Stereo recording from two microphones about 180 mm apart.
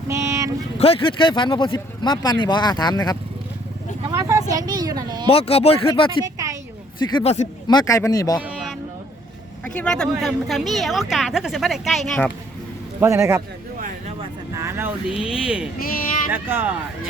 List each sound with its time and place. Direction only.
0.1 s a sound: 15° right (ahead or behind)
0.8 s speech: 30° left (ahead or behind)
4.1 s speech: 15° right (ahead or behind)
5.3 s speech: 35° left (ahead or behind)
6.2 s a sound: 20° right (ahead or behind)
7.0 s speech: 25° left (ahead or behind)
9.7 s speech: 5° left (ahead or behind)
13.0 s a man's voice: 15° right (ahead or behind)
14.5 s a man's voice: 15° right (ahead or behind)